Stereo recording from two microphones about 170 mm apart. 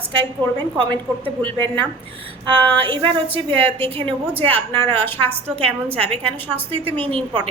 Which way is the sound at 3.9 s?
35° right (ahead or behind).